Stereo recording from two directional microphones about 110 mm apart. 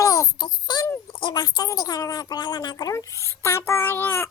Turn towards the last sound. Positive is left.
turn(degrees=20)  # may be behind; listen again after turning